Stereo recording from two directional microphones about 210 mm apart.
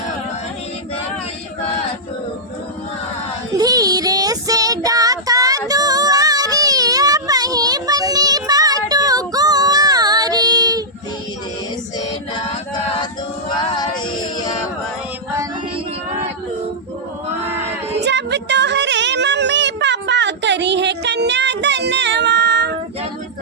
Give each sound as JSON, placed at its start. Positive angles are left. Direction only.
{"t": 3.6, "sound": "child singing", "side_deg": -15}
{"t": 11.9, "sound": "music", "side_deg": 25}
{"t": 13.5, "sound": "male singing", "side_deg": 20}
{"t": 18.0, "sound": "a sound", "side_deg": -55}